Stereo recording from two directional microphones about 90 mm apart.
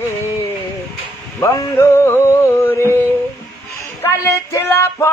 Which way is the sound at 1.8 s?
30° left (ahead or behind).